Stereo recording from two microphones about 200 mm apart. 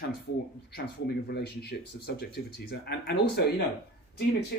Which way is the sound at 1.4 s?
55° left (ahead or behind).